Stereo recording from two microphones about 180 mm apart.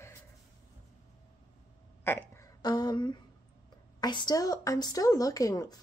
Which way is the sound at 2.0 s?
15° left (ahead or behind).